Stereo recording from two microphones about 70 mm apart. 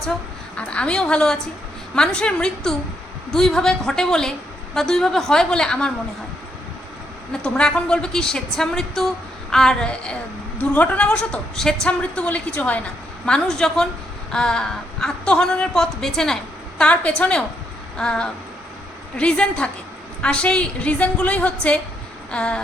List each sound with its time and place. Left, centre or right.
0.5 s a woman's voice: centre
7.4 s a woman's voice: centre
13.2 s a woman's voice: centre